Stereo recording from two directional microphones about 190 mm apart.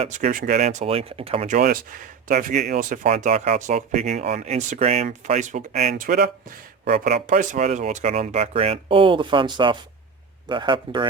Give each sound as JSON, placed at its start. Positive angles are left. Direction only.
{"t": 0.0, "sound": "speech", "side_deg": -40}
{"t": 5.9, "sound": "speech", "side_deg": -50}
{"t": 7.0, "sound": "speech", "side_deg": -40}